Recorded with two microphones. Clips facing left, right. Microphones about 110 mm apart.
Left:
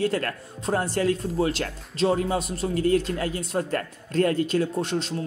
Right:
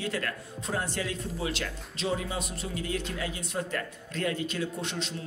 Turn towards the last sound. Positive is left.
turn(degrees=40)  # may be behind; listen again after turning